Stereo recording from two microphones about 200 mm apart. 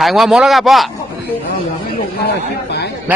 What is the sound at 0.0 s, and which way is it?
Speech, centre (ahead or behind).